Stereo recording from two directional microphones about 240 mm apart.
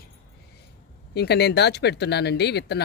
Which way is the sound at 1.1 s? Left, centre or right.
Left.